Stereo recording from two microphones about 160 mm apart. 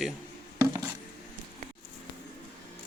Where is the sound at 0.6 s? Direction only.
15° right (ahead or behind).